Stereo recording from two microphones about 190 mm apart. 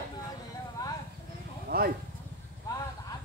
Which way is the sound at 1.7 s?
50° right (ahead or behind).